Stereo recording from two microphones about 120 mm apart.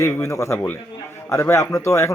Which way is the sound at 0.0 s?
25° left (ahead or behind).